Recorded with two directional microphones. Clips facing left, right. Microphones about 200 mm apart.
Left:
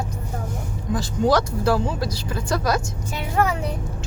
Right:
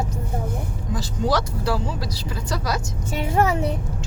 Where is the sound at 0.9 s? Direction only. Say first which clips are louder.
Left 4 dB; 50° left (ahead or behind).